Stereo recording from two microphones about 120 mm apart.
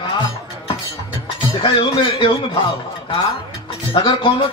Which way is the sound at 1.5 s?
40° left (ahead or behind).